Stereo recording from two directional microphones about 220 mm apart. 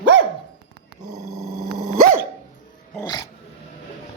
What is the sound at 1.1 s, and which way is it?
Dog, 15° right (ahead or behind).